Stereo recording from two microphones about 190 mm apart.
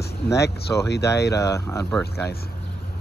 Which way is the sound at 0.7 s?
10° left (ahead or behind).